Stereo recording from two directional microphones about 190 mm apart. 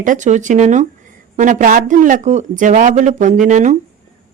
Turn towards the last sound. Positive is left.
turn(degrees=-40)  # may be behind; listen again after turning